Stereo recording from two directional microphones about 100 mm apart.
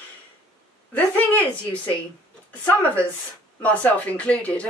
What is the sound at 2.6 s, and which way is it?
A woman's voice, 15° left (ahead or behind).